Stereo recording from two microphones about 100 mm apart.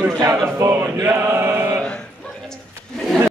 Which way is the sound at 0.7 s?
25° right (ahead or behind).